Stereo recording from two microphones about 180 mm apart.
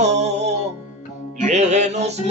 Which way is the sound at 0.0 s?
40° right (ahead or behind).